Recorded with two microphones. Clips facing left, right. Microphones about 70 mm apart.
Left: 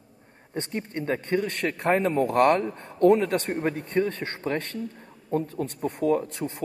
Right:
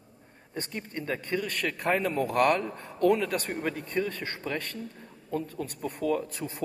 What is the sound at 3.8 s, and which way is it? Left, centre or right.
Speech, left.